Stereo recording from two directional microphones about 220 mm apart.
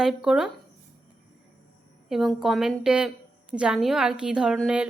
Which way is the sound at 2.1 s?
Centre (ahead or behind).